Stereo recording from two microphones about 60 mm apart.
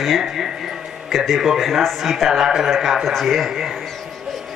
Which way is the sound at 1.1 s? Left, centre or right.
Centre.